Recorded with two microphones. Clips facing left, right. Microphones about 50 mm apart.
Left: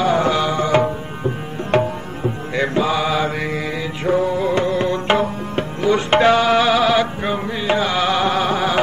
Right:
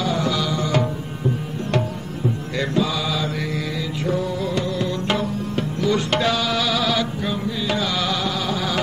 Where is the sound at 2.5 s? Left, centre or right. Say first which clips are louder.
Left 5 dB; left.